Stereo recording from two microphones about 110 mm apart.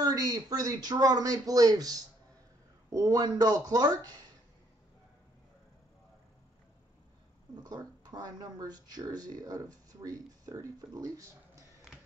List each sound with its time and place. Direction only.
0.0 s a man's voice: 35° right (ahead or behind)
7.6 s a man's voice: 35° right (ahead or behind)